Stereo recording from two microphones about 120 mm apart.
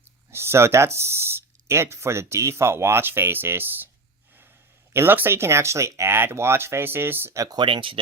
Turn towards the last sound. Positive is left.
turn(degrees=-45)  # may be behind; listen again after turning